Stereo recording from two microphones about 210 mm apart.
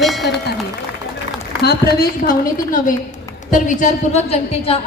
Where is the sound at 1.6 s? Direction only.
50° left (ahead or behind); by 4.8 s 30° left (ahead or behind).